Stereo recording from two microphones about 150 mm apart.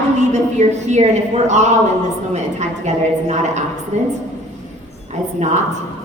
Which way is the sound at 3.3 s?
50° right (ahead or behind).